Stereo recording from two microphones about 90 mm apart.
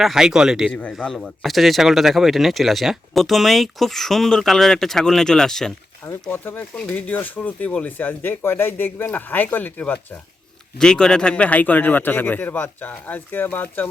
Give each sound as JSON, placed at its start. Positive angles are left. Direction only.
{"t": 0.0, "sound": "speech", "side_deg": -5}
{"t": 0.7, "sound": "a man's voice", "side_deg": 15}
{"t": 6.3, "sound": "speech", "side_deg": 20}